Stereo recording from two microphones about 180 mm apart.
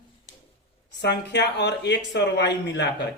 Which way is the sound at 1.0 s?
70° left (ahead or behind).